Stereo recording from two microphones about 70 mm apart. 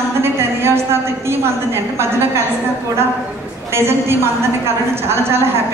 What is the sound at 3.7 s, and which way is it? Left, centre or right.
A woman's voice, right.